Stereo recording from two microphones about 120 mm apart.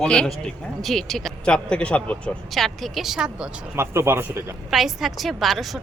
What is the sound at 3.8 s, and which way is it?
Speech, 20° right (ahead or behind).